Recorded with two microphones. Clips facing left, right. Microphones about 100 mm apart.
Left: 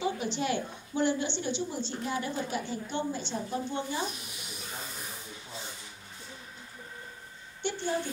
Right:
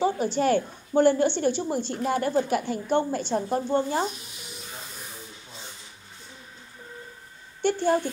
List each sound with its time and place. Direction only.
0.0 s a woman's voice: 40° right (ahead or behind)
7.6 s a woman's voice: 55° right (ahead or behind)